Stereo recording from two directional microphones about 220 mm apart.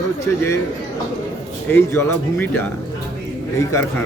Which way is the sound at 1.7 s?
10° left (ahead or behind).